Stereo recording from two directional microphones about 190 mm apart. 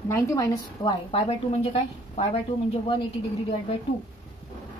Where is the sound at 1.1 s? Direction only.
30° left (ahead or behind).